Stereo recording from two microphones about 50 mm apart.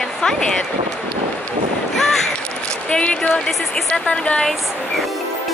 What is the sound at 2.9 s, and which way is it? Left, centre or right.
Speech, centre.